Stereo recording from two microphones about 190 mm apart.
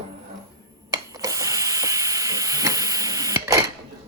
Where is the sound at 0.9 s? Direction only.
15° right (ahead or behind).